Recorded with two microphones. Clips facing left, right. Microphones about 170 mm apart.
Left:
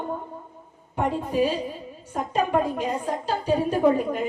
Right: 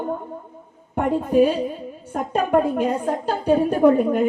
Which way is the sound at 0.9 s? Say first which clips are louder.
Right 6 dB; 55° right (ahead or behind).